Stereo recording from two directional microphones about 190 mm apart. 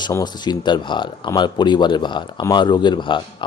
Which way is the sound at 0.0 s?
20° left (ahead or behind).